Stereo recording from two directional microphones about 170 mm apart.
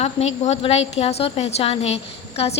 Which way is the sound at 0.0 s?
40° left (ahead or behind).